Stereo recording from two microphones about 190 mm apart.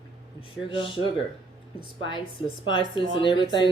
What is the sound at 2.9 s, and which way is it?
Speech, 25° left (ahead or behind).